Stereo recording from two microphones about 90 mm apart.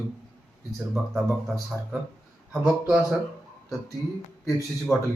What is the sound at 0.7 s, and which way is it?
Speech, centre (ahead or behind).